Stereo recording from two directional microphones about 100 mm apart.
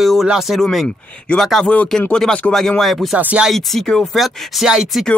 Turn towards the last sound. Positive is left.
turn(degrees=0)  # may be behind; listen again after turning